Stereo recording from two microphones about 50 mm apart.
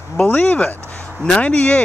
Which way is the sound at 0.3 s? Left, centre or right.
Left.